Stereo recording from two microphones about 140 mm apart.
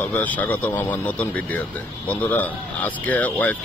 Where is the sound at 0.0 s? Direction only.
10° left (ahead or behind).